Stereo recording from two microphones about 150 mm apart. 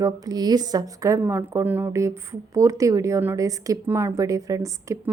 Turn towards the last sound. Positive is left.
turn(degrees=-20)  # may be behind; listen again after turning